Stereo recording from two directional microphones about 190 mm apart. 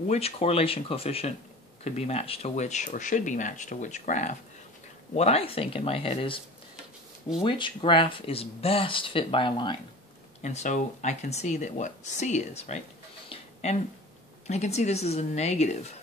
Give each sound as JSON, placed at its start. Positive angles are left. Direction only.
{"t": 0.1, "sound": "speech", "side_deg": 35}
{"t": 7.4, "sound": "speech", "side_deg": 25}
{"t": 10.4, "sound": "speech", "side_deg": 40}
{"t": 13.3, "sound": "a sound", "side_deg": 35}
{"t": 14.5, "sound": "speech", "side_deg": 35}